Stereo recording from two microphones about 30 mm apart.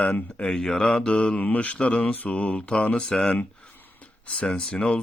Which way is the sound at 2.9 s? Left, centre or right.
Left.